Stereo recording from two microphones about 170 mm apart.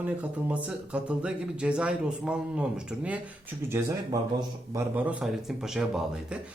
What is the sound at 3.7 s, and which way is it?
A man's voice, 20° right (ahead or behind).